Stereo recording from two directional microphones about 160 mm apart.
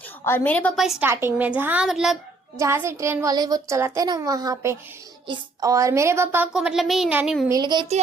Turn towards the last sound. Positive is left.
turn(degrees=-25)  # may be behind; listen again after turning